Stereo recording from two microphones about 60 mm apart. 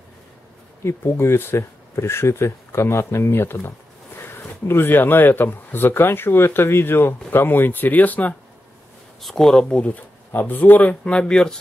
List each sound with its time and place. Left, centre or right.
0.8 s speech: left
9.2 s speech: centre; by 11.1 s left
11.1 s speech: centre